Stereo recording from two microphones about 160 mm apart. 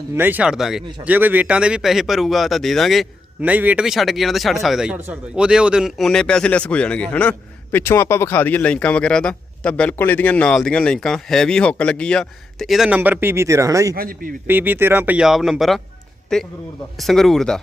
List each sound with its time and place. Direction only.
0.1 s speech: 10° right (ahead or behind)
13.9 s a man's voice: 65° right (ahead or behind)
14.4 s speech: 10° right (ahead or behind)